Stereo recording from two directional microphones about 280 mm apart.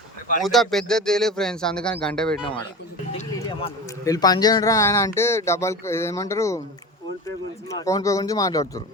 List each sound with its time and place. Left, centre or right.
0.4 s speech: centre